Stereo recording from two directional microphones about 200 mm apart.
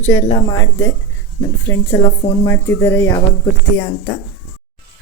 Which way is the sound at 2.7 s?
15° left (ahead or behind).